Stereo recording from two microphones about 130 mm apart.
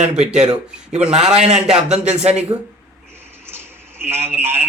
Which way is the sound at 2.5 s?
30° right (ahead or behind).